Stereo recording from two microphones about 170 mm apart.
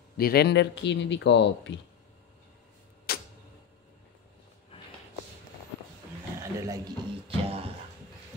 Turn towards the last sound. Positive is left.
turn(degrees=-35)  # may be behind; listen again after turning